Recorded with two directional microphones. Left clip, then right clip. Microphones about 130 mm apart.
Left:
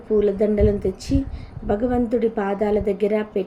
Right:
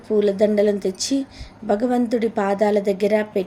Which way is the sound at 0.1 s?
25° right (ahead or behind).